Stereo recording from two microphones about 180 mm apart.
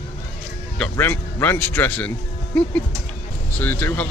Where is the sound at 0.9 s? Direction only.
10° left (ahead or behind).